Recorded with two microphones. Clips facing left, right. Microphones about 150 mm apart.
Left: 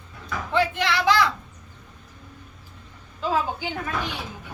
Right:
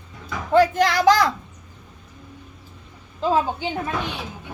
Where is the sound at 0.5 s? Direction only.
40° right (ahead or behind).